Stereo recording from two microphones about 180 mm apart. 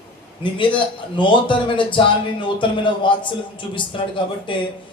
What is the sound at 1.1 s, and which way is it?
A man's voice, 25° left (ahead or behind).